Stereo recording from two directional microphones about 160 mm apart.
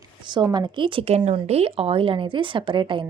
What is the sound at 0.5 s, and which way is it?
A woman's voice, 30° right (ahead or behind).